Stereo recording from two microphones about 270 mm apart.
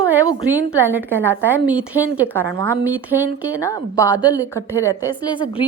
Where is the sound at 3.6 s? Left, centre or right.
Centre.